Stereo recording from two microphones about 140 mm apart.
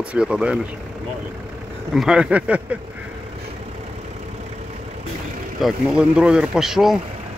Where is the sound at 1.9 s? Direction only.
5° right (ahead or behind).